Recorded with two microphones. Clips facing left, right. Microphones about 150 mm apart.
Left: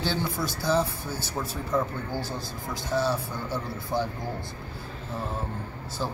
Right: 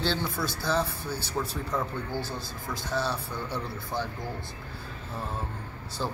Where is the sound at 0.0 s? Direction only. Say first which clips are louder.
Left 1 dB; 10° left (ahead or behind).